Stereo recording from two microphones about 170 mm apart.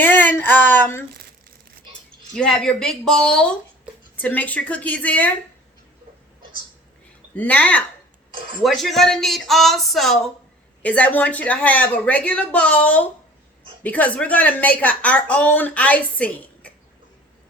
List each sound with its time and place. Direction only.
0.0 s a sound: 10° left (ahead or behind)
2.3 s a woman's voice: 5° left (ahead or behind)
7.3 s a woman's voice: 10° left (ahead or behind)